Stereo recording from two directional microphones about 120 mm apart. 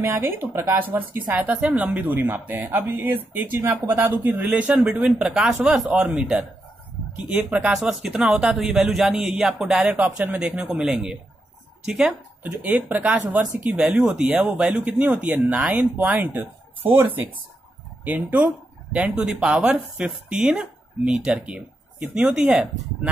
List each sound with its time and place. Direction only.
0.0 s speech: 15° right (ahead or behind)
18.0 s speech: 10° right (ahead or behind)